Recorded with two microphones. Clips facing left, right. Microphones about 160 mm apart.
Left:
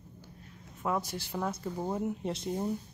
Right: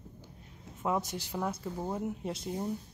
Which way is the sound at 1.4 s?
5° right (ahead or behind).